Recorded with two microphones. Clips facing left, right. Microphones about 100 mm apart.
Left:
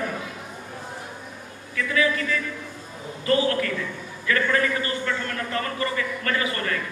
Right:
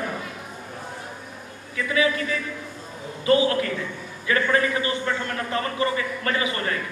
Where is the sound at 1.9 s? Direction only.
20° right (ahead or behind).